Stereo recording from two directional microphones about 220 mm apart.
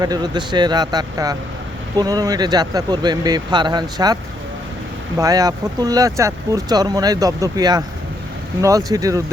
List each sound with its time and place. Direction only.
0.0 s speech: 20° right (ahead or behind)